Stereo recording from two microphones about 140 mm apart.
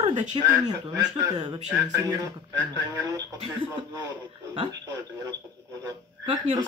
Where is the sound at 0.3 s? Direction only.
30° right (ahead or behind).